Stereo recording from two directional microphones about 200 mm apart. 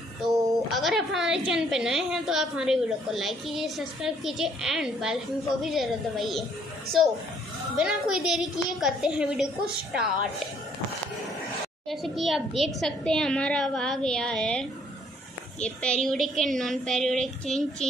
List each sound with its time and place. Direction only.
0.3 s a sound: 15° right (ahead or behind)
0.7 s a woman's voice: centre (ahead or behind)
11.9 s a woman's voice: centre (ahead or behind)